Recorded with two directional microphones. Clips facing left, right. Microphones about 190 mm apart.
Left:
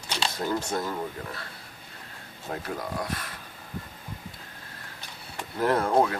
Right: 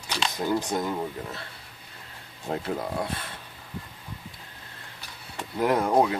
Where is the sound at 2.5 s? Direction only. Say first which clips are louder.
Right 4 dB; 25° right (ahead or behind).